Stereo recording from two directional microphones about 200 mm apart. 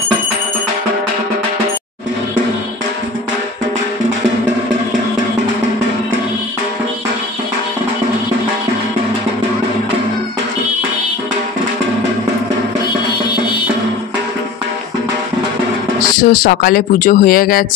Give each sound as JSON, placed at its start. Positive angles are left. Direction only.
{"t": 16.2, "sound": "speech", "side_deg": 45}